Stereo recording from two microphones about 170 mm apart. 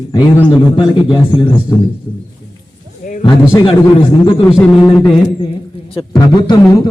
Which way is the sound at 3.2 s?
25° left (ahead or behind).